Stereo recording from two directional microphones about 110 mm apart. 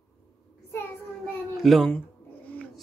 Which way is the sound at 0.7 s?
20° left (ahead or behind).